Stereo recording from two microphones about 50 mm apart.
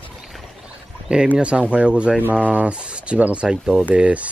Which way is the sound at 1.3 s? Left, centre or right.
Right.